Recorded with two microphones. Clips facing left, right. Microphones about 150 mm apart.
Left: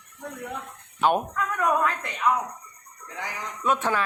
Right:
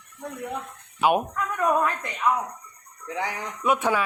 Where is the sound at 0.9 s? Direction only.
10° right (ahead or behind).